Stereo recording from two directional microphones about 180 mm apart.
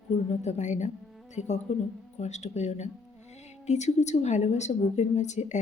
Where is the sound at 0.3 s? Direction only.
40° left (ahead or behind).